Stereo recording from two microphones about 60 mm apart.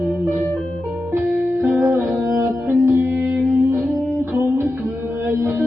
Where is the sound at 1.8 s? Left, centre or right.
Right.